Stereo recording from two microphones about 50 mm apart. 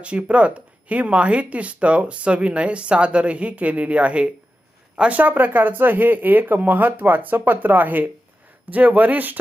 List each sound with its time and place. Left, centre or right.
0.0 s speech: right
5.1 s speech: right